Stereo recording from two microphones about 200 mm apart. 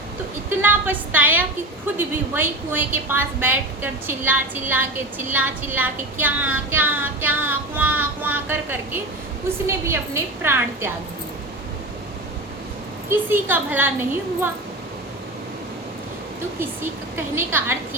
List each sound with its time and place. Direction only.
0.6 s a woman's voice: 10° right (ahead or behind)
13.1 s a woman's voice: 10° right (ahead or behind)
16.6 s a woman's voice: 10° right (ahead or behind)